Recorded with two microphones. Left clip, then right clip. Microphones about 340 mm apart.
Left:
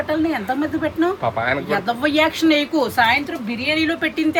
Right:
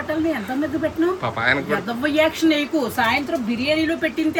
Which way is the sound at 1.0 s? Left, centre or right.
Centre.